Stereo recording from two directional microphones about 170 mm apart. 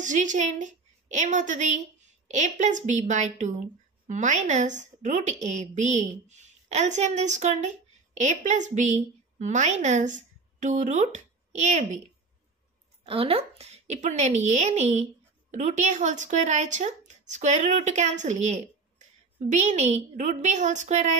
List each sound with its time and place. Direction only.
0.0 s a woman's voice: 45° right (ahead or behind)
13.0 s a woman's voice: 35° right (ahead or behind)